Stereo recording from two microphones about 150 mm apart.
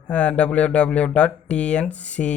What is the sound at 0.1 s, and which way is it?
Speech, 5° left (ahead or behind).